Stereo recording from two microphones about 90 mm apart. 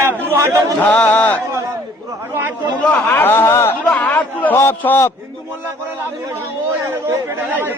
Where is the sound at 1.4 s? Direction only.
35° right (ahead or behind).